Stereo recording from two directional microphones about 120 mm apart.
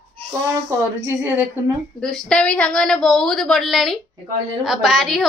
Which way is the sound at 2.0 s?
5° left (ahead or behind).